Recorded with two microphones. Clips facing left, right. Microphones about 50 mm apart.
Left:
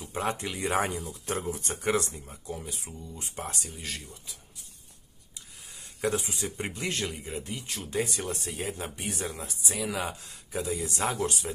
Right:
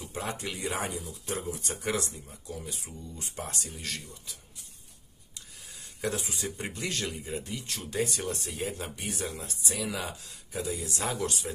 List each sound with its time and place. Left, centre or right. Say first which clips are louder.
0.2 s speech: left 5 dB; left
0.7 s speech: left 6 dB; left
3.8 s speech: even; centre
5.9 s speech: left 3 dB; left
7.6 s speech: left 1 dB; centre
8.5 s speech: even; left
9.2 s speech: even; left
9.7 s speech: left 2 dB; centre
10.0 s speech: left 3 dB; left